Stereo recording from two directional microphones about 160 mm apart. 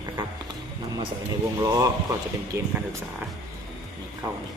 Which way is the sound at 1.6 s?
20° right (ahead or behind).